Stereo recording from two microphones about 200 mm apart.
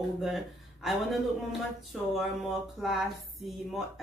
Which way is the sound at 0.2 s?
Centre (ahead or behind).